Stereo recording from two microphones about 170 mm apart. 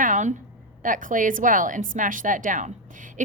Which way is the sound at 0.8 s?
50° right (ahead or behind).